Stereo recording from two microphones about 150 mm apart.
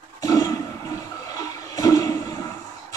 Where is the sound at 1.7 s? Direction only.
25° left (ahead or behind).